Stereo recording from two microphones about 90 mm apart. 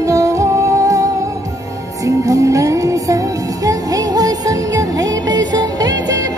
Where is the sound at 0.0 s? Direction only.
40° right (ahead or behind).